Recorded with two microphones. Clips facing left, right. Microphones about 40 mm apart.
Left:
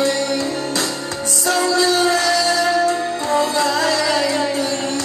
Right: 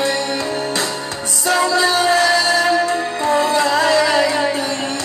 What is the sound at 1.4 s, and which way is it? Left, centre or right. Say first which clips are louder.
Music: right 1 dB; right.